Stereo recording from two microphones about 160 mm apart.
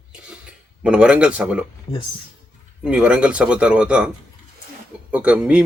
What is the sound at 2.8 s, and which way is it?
A man's voice, 5° right (ahead or behind).